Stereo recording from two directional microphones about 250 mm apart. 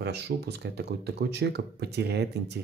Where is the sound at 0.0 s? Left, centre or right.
Right.